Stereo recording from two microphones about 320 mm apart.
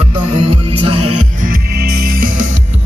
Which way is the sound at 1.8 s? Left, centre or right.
Right.